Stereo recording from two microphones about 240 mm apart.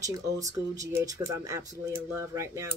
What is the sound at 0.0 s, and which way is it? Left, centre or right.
A woman's voice, centre.